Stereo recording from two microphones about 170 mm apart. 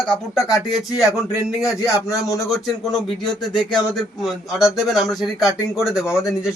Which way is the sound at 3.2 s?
25° left (ahead or behind).